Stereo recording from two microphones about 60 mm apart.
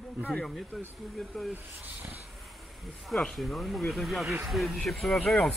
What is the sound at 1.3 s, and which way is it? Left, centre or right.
Speech, centre.